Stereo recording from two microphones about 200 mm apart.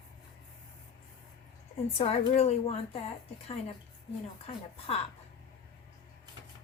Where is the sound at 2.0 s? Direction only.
30° left (ahead or behind).